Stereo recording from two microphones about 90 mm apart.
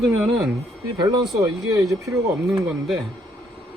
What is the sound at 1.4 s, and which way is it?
Speech, 40° right (ahead or behind).